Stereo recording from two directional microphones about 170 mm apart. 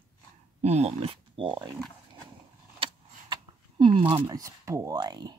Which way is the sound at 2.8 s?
30° right (ahead or behind).